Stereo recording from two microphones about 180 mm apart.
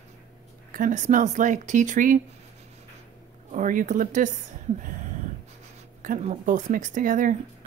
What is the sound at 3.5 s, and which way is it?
Speech, 45° right (ahead or behind).